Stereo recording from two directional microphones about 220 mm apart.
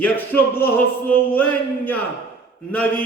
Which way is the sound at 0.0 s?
10° left (ahead or behind).